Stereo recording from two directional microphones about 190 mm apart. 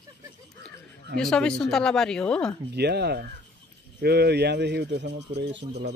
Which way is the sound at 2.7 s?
60° right (ahead or behind).